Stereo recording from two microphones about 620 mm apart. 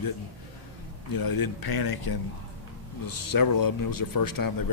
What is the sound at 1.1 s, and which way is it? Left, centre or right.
Speech, left.